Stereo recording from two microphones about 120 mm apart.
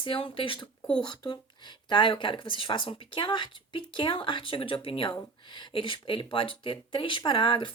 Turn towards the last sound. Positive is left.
turn(degrees=45)  # may be behind; listen again after turning